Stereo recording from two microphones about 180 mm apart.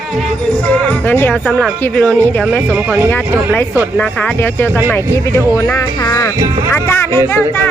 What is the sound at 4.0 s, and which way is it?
Speech, 5° left (ahead or behind).